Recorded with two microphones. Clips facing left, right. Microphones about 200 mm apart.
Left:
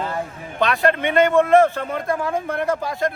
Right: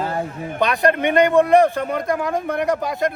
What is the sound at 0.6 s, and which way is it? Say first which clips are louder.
A man's voice: right 1 dB; 15° right (ahead or behind).